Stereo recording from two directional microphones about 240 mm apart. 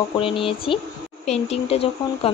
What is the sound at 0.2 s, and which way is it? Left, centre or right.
Speech, left.